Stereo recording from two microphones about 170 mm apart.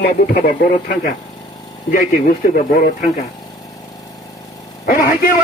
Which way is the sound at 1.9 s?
55° left (ahead or behind).